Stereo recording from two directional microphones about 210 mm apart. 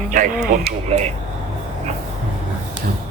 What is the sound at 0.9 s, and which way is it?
Speech, 30° right (ahead or behind).